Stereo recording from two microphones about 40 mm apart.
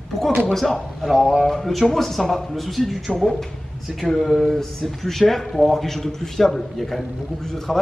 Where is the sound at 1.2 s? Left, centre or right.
Centre.